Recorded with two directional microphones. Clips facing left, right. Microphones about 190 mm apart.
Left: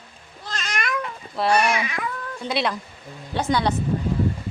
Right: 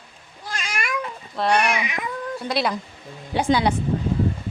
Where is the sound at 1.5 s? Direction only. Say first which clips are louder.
Left 1 dB; 15° right (ahead or behind).